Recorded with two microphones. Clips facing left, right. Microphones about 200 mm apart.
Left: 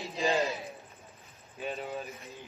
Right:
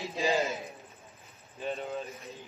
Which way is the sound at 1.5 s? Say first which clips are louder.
Right 1 dB; centre (ahead or behind).